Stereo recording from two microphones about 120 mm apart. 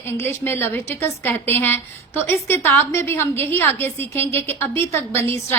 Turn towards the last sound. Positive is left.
turn(degrees=20)  # may be behind; listen again after turning